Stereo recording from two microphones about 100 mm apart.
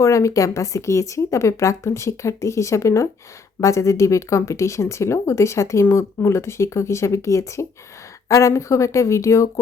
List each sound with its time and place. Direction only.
0.0 s speech: 30° left (ahead or behind)